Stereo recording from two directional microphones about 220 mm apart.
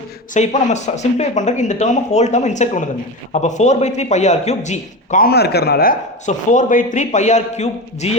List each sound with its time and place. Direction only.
0.3 s a man's voice: 30° left (ahead or behind)